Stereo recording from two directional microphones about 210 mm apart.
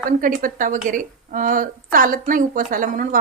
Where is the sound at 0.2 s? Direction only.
40° right (ahead or behind).